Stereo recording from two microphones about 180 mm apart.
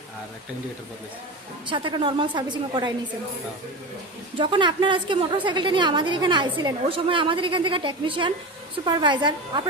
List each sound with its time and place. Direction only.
1.6 s a woman's voice: 25° right (ahead or behind)
4.4 s a woman's voice: 25° right (ahead or behind)